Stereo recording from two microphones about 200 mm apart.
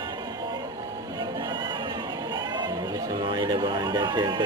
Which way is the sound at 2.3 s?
20° right (ahead or behind).